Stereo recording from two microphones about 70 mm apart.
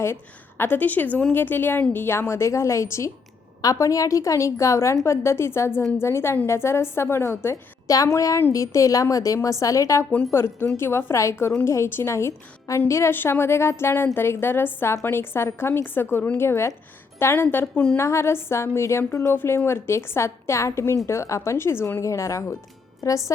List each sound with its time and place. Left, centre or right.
0.0 s a woman's voice: left
3.6 s a woman's voice: left
10.3 s a woman's voice: left
22.0 s a woman's voice: left